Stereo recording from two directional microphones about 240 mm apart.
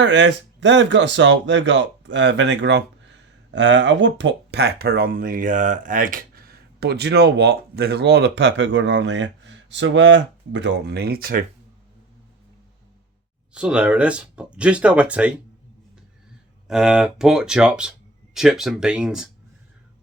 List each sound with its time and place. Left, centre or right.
0.0 s speech: right
13.5 s speech: centre
16.6 s speech: centre